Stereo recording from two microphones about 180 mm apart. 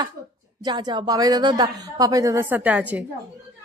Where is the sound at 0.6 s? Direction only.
25° right (ahead or behind).